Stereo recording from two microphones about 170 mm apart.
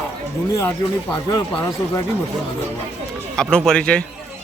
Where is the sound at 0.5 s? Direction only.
15° left (ahead or behind).